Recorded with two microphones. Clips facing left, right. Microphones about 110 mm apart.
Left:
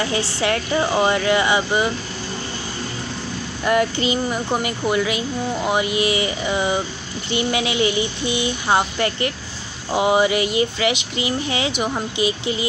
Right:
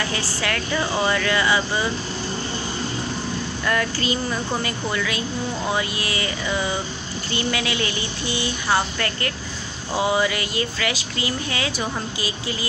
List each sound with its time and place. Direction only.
0.0 s speech: 25° left (ahead or behind)
3.6 s speech: 20° left (ahead or behind)